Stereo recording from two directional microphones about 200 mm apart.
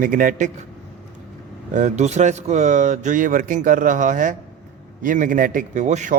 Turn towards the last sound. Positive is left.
turn(degrees=-35)  # may be behind; listen again after turning